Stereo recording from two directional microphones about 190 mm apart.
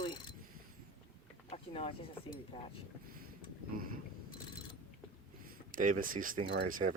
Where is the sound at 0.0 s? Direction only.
25° left (ahead or behind).